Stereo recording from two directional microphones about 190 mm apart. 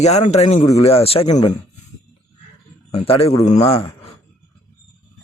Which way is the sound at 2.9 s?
30° left (ahead or behind).